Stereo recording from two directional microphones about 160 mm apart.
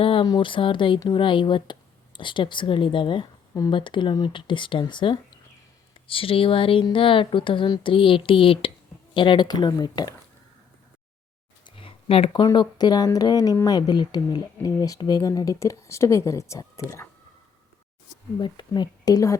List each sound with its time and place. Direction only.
0.0 s speech: 35° left (ahead or behind)
11.6 s a sound: 35° left (ahead or behind)
12.4 s speech: 25° left (ahead or behind)
18.3 s speech: 30° left (ahead or behind)